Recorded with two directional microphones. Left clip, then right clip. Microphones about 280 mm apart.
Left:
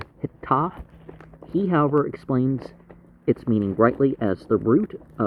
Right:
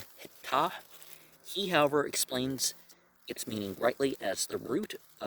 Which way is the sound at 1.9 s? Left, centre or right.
Right.